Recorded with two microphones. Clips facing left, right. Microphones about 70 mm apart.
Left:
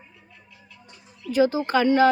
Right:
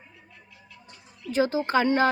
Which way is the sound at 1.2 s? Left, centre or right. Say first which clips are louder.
Left 3 dB; right.